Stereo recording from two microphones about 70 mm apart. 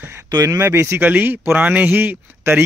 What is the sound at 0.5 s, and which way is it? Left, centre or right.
Speech, right.